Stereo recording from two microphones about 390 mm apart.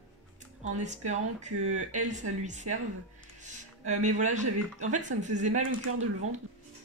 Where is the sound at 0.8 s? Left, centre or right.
Centre.